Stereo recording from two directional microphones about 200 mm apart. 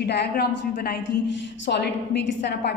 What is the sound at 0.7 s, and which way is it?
Speech, 45° left (ahead or behind).